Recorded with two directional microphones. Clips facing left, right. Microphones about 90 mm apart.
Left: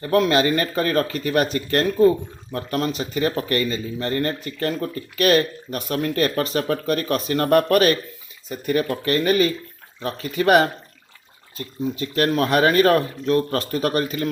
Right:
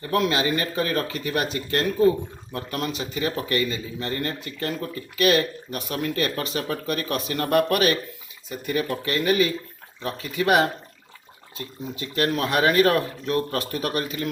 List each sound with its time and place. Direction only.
0.1 s speech: 45° left (ahead or behind)
2.5 s speech: 35° left (ahead or behind)